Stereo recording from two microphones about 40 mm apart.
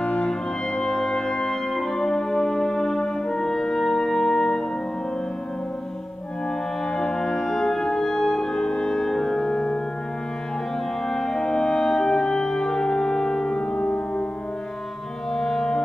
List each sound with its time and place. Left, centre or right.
0.0 s music: left
0.3 s music: centre
7.0 s music: centre
8.6 s french horn: left
8.9 s music: centre
11.1 s french horn: centre
15.3 s music: centre